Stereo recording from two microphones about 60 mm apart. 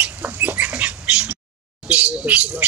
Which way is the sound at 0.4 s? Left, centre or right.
Right.